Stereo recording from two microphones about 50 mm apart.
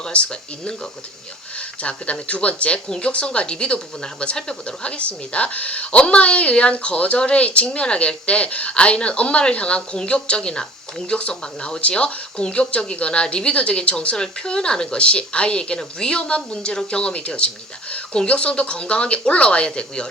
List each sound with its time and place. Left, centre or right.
0.0 s speech: centre